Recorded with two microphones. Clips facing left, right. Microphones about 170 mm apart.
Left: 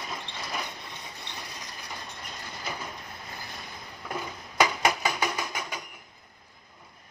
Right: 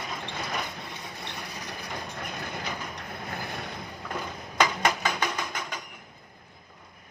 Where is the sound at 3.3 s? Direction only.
60° right (ahead or behind).